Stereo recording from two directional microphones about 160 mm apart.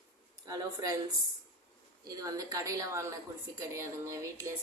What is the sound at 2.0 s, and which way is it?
Speech, 20° right (ahead or behind).